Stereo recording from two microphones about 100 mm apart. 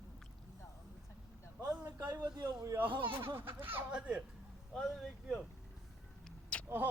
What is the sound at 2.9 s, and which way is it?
Speech, 55° right (ahead or behind).